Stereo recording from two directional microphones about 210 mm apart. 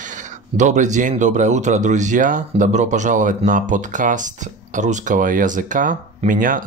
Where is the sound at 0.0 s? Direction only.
35° right (ahead or behind).